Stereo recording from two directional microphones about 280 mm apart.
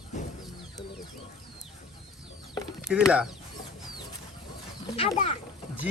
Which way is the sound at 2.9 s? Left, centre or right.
Centre.